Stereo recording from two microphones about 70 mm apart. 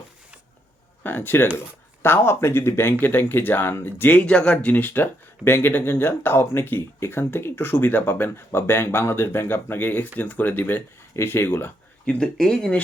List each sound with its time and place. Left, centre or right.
1.0 s speech: left
12.0 s speech: centre